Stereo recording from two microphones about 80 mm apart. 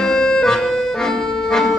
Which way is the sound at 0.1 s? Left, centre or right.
Centre.